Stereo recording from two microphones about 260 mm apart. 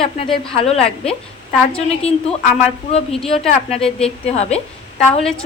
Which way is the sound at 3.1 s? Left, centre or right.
Centre.